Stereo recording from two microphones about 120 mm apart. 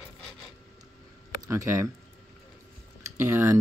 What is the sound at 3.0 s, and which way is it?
Speech, 20° right (ahead or behind).